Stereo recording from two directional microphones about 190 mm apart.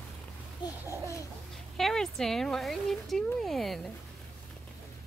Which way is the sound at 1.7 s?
Centre (ahead or behind).